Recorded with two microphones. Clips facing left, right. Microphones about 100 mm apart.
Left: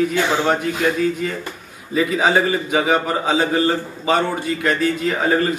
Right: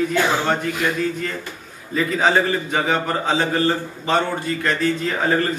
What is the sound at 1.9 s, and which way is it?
A man's voice, 5° left (ahead or behind).